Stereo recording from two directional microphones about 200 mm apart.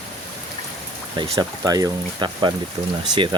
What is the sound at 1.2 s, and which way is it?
Speech, 20° right (ahead or behind).